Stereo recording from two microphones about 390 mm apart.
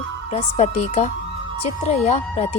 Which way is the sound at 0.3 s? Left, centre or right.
Centre.